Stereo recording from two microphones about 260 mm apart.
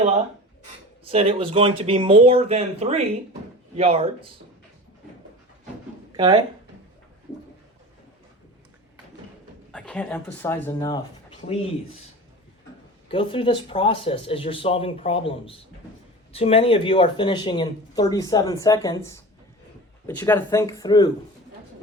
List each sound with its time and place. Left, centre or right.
1.0 s speech: right
6.1 s speech: centre
9.7 s speech: centre
13.1 s speech: centre